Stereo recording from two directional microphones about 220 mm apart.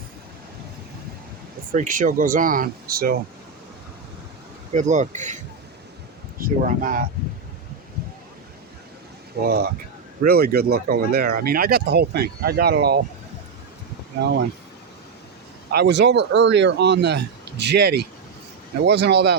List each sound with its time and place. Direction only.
1.7 s speech: 35° right (ahead or behind)
4.7 s speech: 35° right (ahead or behind)
6.4 s speech: 40° right (ahead or behind)
9.4 s speech: 45° right (ahead or behind)
15.7 s speech: 50° right (ahead or behind)